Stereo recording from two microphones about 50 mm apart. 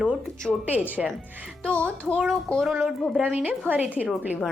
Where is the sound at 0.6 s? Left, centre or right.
Right.